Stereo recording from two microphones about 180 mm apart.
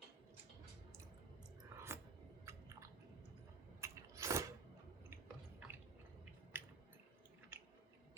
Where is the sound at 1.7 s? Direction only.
15° right (ahead or behind).